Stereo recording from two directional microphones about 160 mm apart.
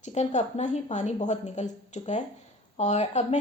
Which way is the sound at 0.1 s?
45° left (ahead or behind).